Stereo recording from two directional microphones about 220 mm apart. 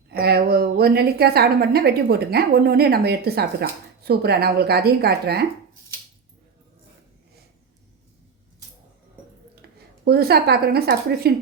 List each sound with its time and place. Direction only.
0.1 s a woman's voice: 45° right (ahead or behind)
9.6 s a woman's voice: 45° right (ahead or behind)